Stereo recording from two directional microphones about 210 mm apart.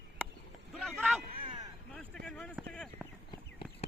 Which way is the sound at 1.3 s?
25° right (ahead or behind).